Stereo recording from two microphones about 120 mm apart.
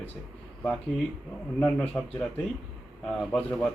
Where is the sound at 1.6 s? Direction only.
10° left (ahead or behind).